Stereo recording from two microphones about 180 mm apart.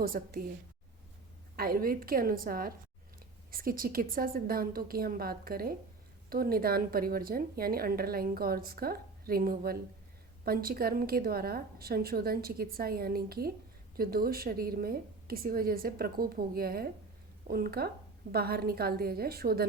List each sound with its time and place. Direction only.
0.0 s speech: 55° right (ahead or behind)
1.5 s speech: 55° right (ahead or behind)